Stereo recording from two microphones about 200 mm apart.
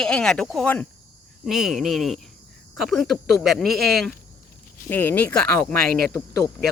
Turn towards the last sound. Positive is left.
turn(degrees=10)  # may be behind; listen again after turning